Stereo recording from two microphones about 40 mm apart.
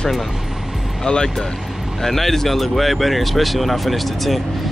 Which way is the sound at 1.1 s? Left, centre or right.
Centre.